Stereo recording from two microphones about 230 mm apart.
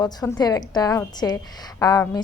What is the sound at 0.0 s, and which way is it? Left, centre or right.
A woman's voice, centre.